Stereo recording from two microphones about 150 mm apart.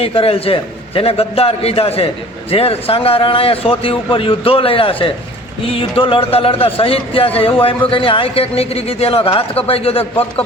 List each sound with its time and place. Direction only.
0.0 s a man's voice: 40° left (ahead or behind)